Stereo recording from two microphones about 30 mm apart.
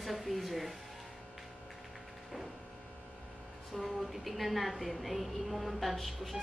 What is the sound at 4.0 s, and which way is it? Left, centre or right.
A woman's voice, centre.